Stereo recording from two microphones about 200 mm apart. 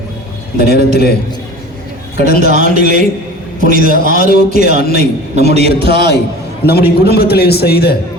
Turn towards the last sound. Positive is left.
turn(degrees=50)  # may be behind; listen again after turning